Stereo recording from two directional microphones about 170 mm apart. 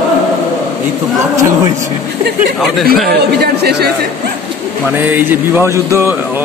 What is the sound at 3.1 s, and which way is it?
Speech, 75° right (ahead or behind).